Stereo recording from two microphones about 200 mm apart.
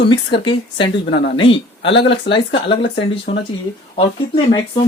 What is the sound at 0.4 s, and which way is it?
Speech, 25° left (ahead or behind).